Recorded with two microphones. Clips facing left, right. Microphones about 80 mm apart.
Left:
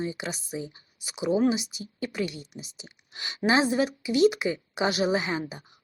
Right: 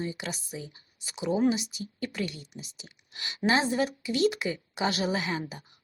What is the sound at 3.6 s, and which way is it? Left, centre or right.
Speech, centre.